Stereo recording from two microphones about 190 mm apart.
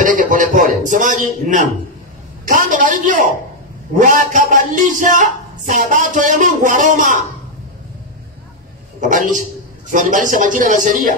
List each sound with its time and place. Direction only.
0.0 s a man's voice: 45° right (ahead or behind)
9.0 s a man's voice: 40° right (ahead or behind)